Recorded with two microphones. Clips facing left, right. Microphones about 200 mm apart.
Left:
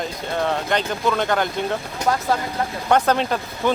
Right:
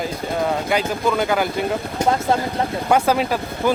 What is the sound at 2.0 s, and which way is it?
Speech, 25° right (ahead or behind).